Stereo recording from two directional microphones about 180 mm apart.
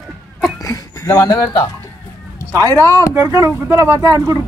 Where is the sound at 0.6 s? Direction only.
20° left (ahead or behind).